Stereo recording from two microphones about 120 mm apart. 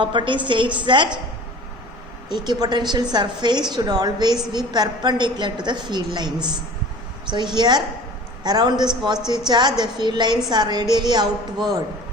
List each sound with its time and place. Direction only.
0.0 s a woman's voice: 40° right (ahead or behind)
2.3 s a woman's voice: 35° right (ahead or behind)